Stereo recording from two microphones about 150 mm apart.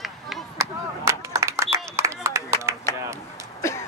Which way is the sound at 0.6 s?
20° right (ahead or behind).